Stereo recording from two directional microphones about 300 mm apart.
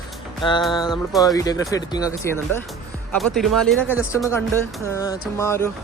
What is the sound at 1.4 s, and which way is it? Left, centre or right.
Speech, centre.